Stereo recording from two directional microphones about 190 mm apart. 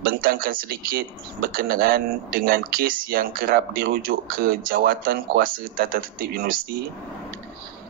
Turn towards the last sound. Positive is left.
turn(degrees=-50)  # may be behind; listen again after turning